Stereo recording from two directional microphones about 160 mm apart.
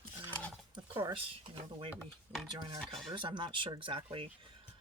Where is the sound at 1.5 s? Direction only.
35° right (ahead or behind).